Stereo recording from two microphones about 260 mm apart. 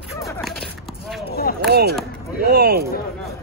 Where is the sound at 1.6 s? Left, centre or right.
Right.